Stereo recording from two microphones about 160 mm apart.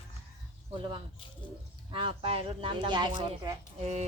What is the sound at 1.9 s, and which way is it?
Speech, 30° right (ahead or behind).